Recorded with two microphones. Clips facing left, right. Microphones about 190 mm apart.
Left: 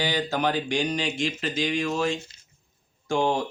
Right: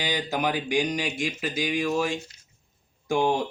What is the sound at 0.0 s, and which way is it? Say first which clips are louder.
Speech: left 2 dB; 15° right (ahead or behind).